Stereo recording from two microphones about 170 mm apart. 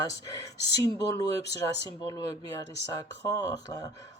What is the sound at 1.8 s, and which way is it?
Speech, 20° left (ahead or behind).